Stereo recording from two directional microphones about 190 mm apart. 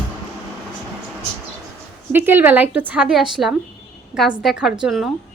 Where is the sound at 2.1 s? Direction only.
10° right (ahead or behind).